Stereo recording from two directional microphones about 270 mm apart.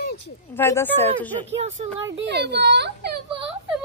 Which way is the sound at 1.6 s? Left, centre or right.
Right.